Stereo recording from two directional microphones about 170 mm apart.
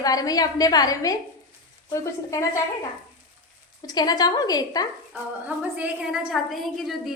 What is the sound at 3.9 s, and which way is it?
Speech, 25° left (ahead or behind).